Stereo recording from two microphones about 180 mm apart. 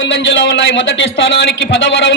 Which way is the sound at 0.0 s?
90° left.